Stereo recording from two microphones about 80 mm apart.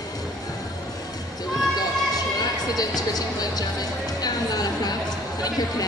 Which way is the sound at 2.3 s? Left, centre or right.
Left.